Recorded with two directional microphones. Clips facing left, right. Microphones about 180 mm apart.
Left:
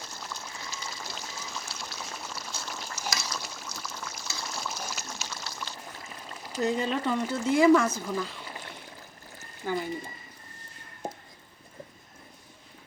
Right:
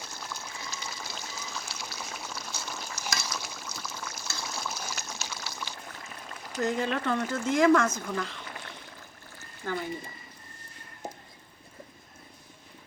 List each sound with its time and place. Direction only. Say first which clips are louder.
0.0 s water: even; centre (ahead or behind)
0.9 s pour: even; centre (ahead or behind)
2.9 s a sound: left 2 dB; centre (ahead or behind)
3.2 s pour: even; 5° right (ahead or behind)
6.4 s speech: left 1 dB; 15° left (ahead or behind)